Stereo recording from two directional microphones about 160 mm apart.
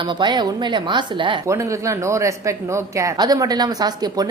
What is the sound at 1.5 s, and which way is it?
Speech, 20° right (ahead or behind).